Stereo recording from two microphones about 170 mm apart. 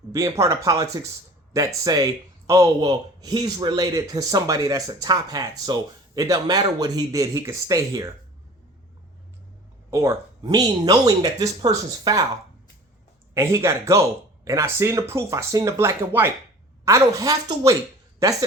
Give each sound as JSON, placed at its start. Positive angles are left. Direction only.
{"t": 0.1, "sound": "a man's voice", "side_deg": -20}
{"t": 9.9, "sound": "a man's voice", "side_deg": -15}
{"t": 13.3, "sound": "a man's voice", "side_deg": -15}